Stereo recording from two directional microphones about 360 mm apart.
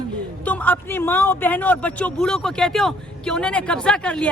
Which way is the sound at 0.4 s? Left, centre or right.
Centre.